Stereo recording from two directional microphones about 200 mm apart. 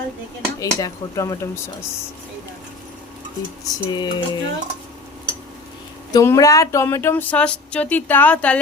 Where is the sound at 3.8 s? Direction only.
20° left (ahead or behind).